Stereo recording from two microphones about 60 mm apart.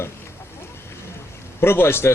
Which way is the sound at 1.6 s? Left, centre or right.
Left.